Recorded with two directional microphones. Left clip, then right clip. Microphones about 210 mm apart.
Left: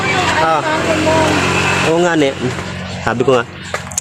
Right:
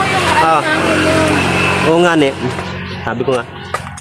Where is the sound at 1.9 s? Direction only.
10° right (ahead or behind).